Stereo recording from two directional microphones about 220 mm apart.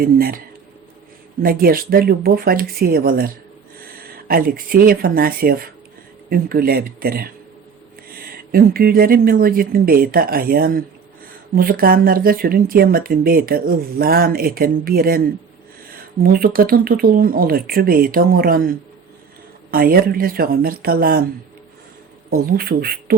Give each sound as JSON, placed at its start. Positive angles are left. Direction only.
{"t": 0.0, "sound": "speech", "side_deg": -40}
{"t": 22.3, "sound": "speech", "side_deg": -40}